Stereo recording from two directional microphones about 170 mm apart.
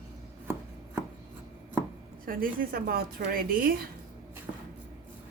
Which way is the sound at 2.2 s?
55° right (ahead or behind).